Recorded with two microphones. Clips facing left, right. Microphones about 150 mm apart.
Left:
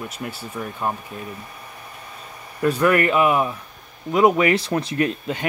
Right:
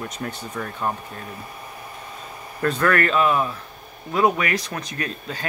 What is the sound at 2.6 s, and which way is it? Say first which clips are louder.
Speech: left 3 dB; 10° left (ahead or behind).